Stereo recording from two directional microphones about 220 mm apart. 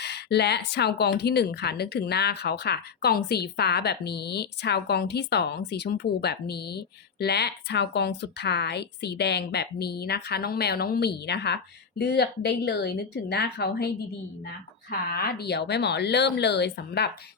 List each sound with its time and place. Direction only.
0.0 s speech: 50° left (ahead or behind)